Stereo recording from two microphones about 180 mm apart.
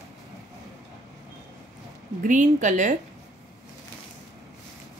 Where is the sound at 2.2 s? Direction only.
45° right (ahead or behind).